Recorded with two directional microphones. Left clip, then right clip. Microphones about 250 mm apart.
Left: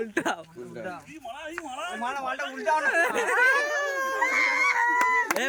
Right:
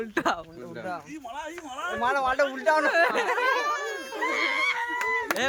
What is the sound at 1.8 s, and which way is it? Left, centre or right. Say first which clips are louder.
Speech: right 6 dB; centre.